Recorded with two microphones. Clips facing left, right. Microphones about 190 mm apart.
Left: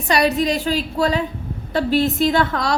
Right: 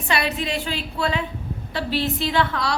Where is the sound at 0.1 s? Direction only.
40° left (ahead or behind).